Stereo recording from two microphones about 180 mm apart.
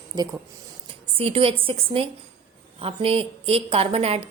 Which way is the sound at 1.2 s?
30° right (ahead or behind).